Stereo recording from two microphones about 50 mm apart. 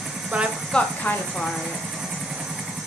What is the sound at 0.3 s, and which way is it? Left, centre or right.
Speech, right.